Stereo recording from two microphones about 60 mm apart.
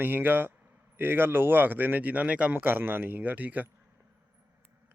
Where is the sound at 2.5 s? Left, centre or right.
Right.